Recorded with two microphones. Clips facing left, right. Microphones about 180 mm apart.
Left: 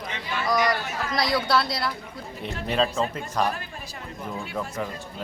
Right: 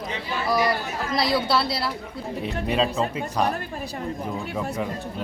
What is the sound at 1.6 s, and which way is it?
Speech, 30° right (ahead or behind).